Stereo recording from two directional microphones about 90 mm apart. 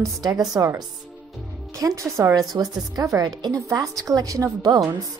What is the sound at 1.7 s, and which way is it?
A woman's voice, 35° right (ahead or behind).